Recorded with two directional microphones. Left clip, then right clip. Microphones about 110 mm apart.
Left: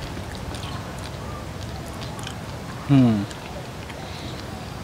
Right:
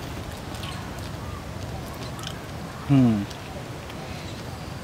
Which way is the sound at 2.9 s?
25° left (ahead or behind).